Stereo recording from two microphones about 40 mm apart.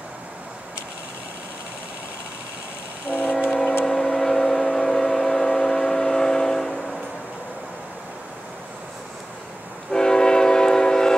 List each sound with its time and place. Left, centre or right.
3.1 s train: left
3.8 s vehicle: centre
9.8 s train: centre